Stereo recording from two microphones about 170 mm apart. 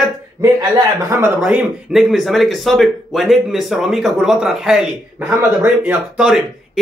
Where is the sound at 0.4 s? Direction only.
20° right (ahead or behind).